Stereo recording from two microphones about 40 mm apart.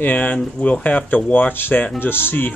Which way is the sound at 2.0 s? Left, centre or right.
Left.